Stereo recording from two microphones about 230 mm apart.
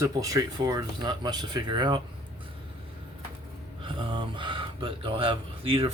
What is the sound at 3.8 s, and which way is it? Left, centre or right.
Speech, right.